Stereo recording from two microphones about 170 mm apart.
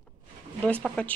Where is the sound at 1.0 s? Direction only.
5° left (ahead or behind).